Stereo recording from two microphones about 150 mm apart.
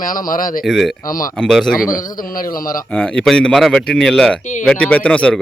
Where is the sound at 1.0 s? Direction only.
65° left (ahead or behind).